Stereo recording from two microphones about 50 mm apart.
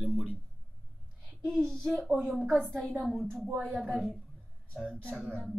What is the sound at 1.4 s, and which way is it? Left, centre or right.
A woman's voice, centre.